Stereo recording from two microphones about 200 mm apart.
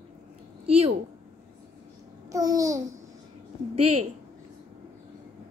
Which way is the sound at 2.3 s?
20° right (ahead or behind).